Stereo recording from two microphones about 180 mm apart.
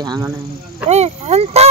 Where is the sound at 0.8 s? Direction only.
35° right (ahead or behind).